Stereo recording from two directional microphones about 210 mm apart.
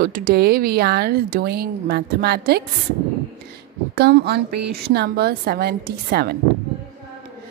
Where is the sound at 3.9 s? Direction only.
50° right (ahead or behind).